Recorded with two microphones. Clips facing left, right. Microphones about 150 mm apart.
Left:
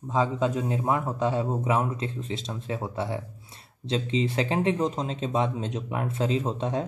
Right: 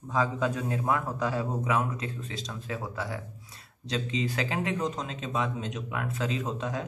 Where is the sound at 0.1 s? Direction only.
25° left (ahead or behind).